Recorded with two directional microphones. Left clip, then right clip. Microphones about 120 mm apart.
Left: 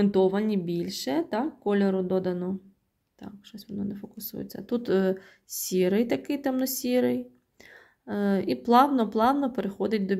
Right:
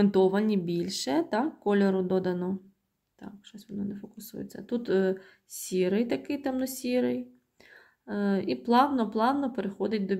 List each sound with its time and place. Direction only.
0.0 s speech: 5° left (ahead or behind)
3.2 s speech: 20° left (ahead or behind)
3.6 s speech: 35° left (ahead or behind)